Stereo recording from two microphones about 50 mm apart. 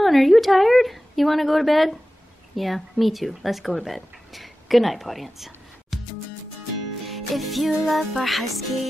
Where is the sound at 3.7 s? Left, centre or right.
Centre.